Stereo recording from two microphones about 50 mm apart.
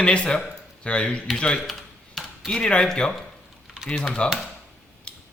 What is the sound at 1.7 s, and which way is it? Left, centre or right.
Computer keyboard, centre.